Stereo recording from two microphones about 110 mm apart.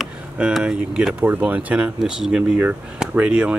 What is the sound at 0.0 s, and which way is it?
Speech, 5° right (ahead or behind).